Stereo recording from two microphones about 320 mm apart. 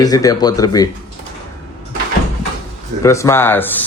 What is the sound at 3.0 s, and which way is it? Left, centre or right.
Speech, centre.